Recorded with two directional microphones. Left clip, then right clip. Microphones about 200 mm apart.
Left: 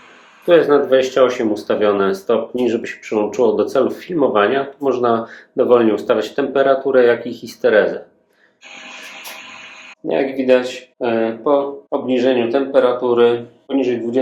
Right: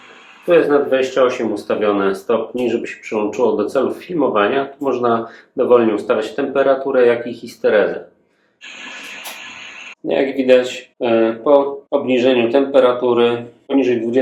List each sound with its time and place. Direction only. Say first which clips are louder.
0.4 s speech: left 1 dB; 35° left (ahead or behind)
10.1 s speech: right 1 dB; 5° left (ahead or behind)